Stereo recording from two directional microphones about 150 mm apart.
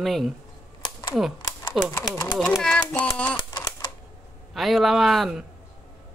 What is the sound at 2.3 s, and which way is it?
A child's voice, centre (ahead or behind).